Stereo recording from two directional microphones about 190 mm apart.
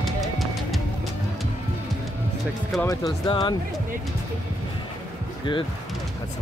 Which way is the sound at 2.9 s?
20° left (ahead or behind).